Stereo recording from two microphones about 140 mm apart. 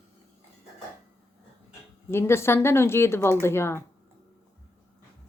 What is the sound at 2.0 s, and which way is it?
Speech, 20° left (ahead or behind).